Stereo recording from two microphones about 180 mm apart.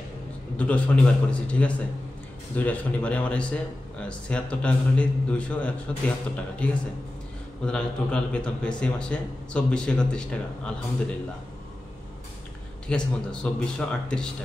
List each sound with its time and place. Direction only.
0.6 s a man's voice: 5° left (ahead or behind)
12.8 s a man's voice: 5° left (ahead or behind)